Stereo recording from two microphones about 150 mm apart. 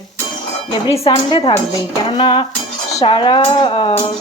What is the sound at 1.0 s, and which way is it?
Speech, 40° left (ahead or behind).